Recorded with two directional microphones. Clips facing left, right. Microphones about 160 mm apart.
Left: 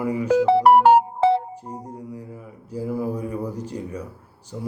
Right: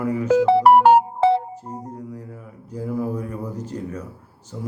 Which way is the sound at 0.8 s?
70° right (ahead or behind).